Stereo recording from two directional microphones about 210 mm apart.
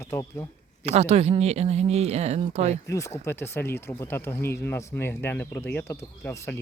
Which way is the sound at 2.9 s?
15° left (ahead or behind).